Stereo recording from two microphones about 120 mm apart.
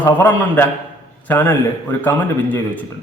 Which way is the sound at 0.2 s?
15° left (ahead or behind).